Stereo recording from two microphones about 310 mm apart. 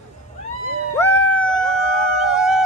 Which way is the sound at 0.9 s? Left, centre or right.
Centre.